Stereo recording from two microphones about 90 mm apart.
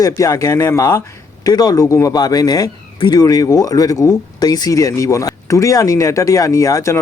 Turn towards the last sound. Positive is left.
turn(degrees=35)  # may be behind; listen again after turning